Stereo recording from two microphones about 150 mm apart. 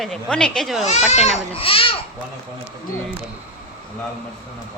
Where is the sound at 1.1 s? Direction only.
50° left (ahead or behind).